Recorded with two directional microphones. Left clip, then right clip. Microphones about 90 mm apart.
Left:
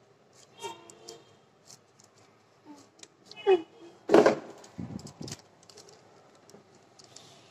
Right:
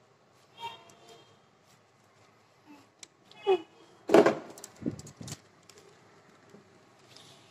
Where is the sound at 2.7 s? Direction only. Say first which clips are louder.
Left 1 dB; 30° left (ahead or behind).